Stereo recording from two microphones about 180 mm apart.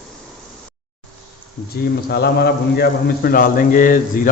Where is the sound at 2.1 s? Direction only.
60° left (ahead or behind).